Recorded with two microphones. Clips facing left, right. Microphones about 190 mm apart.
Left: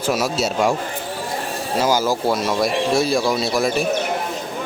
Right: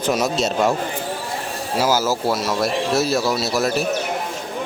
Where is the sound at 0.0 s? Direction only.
5° left (ahead or behind).